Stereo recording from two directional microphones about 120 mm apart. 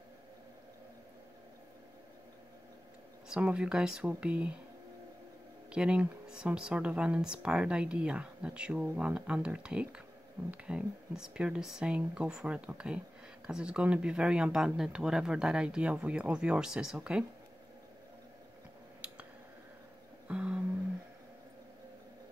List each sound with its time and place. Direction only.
3.3 s speech: 10° right (ahead or behind)
5.7 s speech: 10° right (ahead or behind)
20.2 s music: 10° right (ahead or behind)